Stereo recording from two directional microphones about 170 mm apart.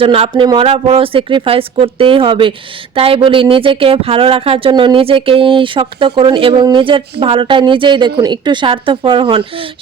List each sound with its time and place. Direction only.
0.0 s speech: 35° right (ahead or behind)